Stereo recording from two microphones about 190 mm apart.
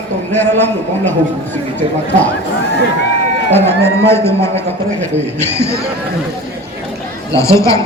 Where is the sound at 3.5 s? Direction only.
10° left (ahead or behind).